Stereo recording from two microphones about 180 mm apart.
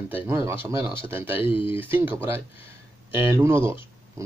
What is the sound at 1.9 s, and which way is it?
Speech, 10° right (ahead or behind).